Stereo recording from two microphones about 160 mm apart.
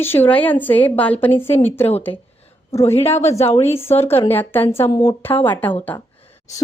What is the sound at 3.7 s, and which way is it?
A woman's voice, 15° left (ahead or behind).